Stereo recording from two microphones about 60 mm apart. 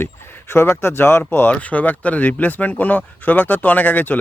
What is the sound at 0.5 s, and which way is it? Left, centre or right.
Speech, left.